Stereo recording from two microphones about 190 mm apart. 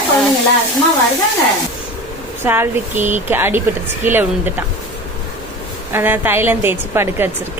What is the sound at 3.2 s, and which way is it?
A woman's voice, 10° right (ahead or behind).